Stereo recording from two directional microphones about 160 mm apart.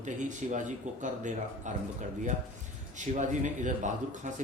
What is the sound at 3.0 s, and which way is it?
A man's voice, 50° right (ahead or behind).